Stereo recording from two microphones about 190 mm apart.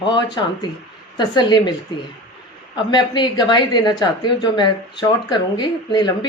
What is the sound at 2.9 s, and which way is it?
A woman's voice, 25° left (ahead or behind).